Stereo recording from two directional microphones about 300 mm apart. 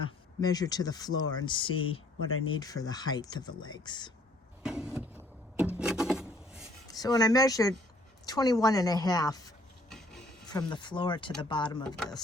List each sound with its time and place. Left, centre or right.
0.4 s speech: centre
2.2 s speech: left
2.6 s speech: centre
4.6 s vehicle: centre
5.7 s a sound: centre
6.8 s speech: centre
9.9 s a sound: centre
10.5 s speech: centre